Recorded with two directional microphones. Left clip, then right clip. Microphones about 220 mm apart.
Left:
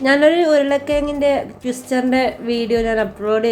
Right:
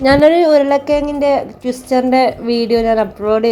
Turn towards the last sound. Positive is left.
turn(degrees=-10)  # may be behind; listen again after turning